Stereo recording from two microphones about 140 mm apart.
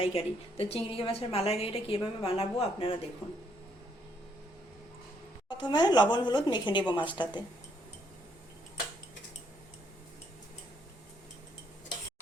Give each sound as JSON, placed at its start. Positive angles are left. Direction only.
{"t": 0.0, "sound": "a woman's voice", "side_deg": 45}
{"t": 5.5, "sound": "a woman's voice", "side_deg": 30}